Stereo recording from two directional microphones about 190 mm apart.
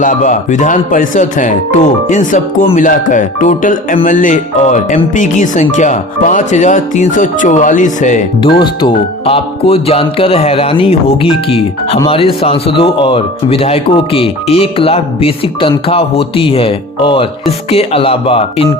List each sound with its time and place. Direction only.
0.0 s speech: 40° left (ahead or behind)
2.6 s music: 40° left (ahead or behind)
3.9 s speech: 40° left (ahead or behind)
8.4 s speech: 25° left (ahead or behind)